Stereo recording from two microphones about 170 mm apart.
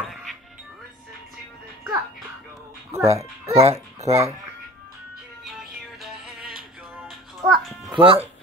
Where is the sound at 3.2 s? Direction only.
20° right (ahead or behind).